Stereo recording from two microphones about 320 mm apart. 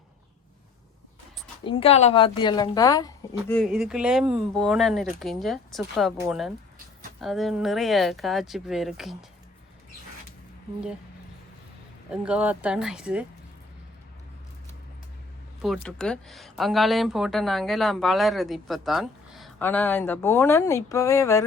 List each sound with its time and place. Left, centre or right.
1.6 s speech: centre
3.5 s speech: centre
12.1 s speech: centre
15.6 s speech: centre